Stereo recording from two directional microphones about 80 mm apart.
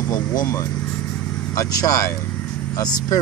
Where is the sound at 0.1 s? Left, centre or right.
Left.